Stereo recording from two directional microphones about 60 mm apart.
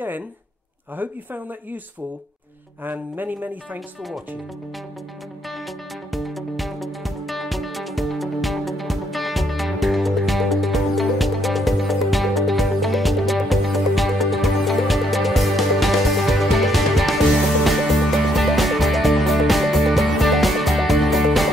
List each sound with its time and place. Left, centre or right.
0.9 s speech: right
2.8 s speech: right
6.1 s music: centre